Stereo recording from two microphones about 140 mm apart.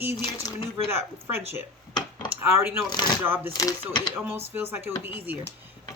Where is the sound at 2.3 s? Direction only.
15° right (ahead or behind).